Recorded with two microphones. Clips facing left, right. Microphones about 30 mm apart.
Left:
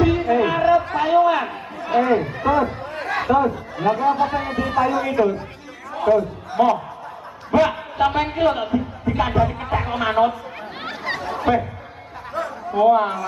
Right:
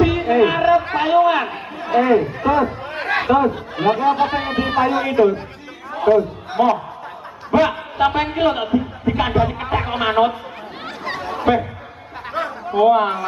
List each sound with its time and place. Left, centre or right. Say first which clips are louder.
0.0 s music: right 2 dB; centre
1.0 s a man's voice: right 2 dB; right
2.1 s speech: right 5 dB; centre
2.8 s a sound: right 3 dB; right
3.3 s a man's voice: right 2 dB; right
3.5 s a man's voice: right 3 dB; right
5.9 s a sound: right 3 dB; centre
6.6 s a man's voice: right 1 dB; centre
10.8 s a sound: left 1 dB; centre
11.1 s snicker: right 3 dB; centre
12.4 s chatter: right 3 dB; right
12.7 s a man's voice: right 2 dB; right